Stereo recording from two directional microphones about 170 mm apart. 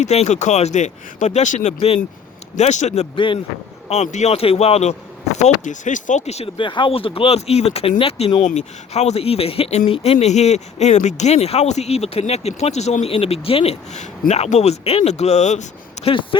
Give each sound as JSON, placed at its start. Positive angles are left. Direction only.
{"t": 0.0, "sound": "speech", "side_deg": 40}